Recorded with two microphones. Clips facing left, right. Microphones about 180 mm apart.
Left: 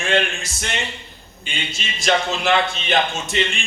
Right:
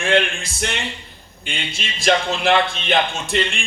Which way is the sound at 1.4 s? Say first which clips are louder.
Right 1 dB; 55° right (ahead or behind).